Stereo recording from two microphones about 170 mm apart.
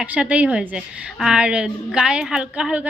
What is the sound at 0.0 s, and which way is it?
A woman's voice, 5° right (ahead or behind).